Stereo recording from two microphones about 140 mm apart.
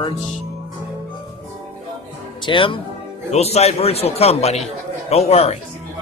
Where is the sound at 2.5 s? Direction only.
35° left (ahead or behind).